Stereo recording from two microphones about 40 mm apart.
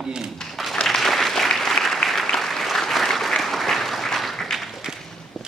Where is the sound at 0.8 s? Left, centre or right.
Centre.